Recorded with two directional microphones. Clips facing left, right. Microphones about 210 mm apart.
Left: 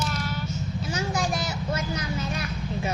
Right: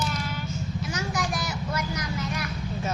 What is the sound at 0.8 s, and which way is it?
Vehicle, 25° left (ahead or behind).